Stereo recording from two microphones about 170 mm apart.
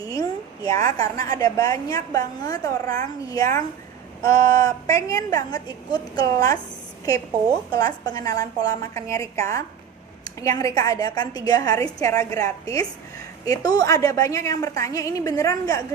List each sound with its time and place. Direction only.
0.0 s a woman's voice: 20° left (ahead or behind)
7.7 s a woman's voice: 20° left (ahead or behind)